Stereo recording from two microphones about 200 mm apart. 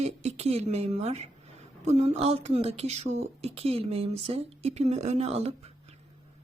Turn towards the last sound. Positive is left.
turn(degrees=-30)  # may be behind; listen again after turning